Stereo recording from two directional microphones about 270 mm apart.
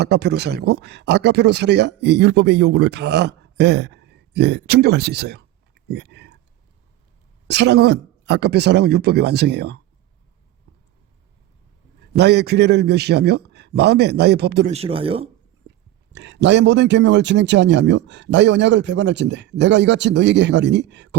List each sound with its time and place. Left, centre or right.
0.0 s a man's voice: right
7.4 s a man's voice: right
12.1 s a man's voice: right
14.7 s speech: right
16.1 s a man's voice: right